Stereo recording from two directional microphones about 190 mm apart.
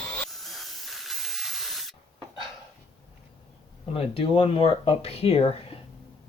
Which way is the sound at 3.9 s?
30° left (ahead or behind).